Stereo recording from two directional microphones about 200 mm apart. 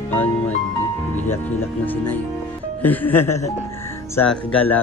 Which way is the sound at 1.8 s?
10° left (ahead or behind).